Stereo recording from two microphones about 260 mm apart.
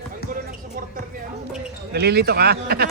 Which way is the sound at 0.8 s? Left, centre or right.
Right.